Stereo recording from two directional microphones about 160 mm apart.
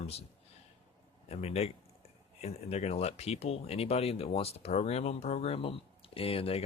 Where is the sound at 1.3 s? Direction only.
40° left (ahead or behind).